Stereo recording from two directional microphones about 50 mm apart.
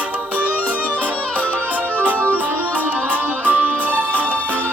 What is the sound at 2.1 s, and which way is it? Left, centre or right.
Music, right.